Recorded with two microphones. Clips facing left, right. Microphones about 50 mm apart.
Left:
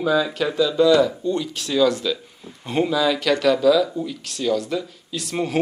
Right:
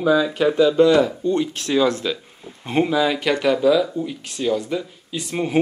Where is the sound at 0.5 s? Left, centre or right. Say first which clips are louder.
Right 1 dB; right.